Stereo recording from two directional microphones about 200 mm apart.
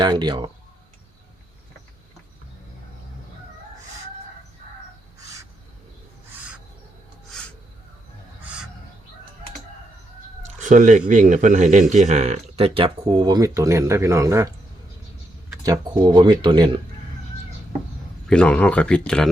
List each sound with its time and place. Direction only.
0.0 s speech: 20° right (ahead or behind)
10.4 s speech: 40° right (ahead or behind); by 14.5 s 15° right (ahead or behind)
15.6 s speech: 15° right (ahead or behind)
18.3 s speech: 5° left (ahead or behind)